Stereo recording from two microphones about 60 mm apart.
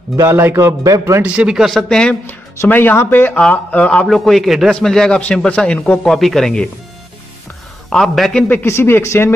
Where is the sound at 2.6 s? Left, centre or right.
Left.